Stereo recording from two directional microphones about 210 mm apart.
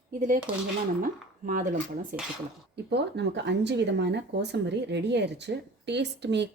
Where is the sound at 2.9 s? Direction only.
55° right (ahead or behind).